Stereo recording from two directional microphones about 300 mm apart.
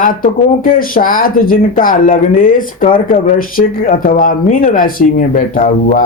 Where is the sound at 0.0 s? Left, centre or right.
Left.